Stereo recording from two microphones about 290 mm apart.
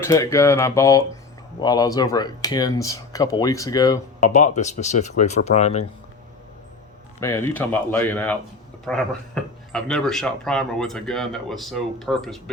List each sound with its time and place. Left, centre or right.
0.0 s speech: centre
4.3 s speech: left
7.2 s speech: centre